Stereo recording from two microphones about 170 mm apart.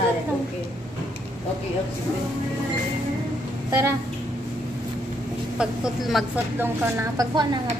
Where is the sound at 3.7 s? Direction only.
15° right (ahead or behind).